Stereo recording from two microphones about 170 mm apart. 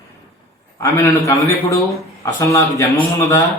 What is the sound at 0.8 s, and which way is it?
A man's voice, 20° left (ahead or behind).